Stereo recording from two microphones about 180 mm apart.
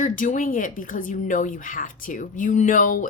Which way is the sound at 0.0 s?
45° left (ahead or behind).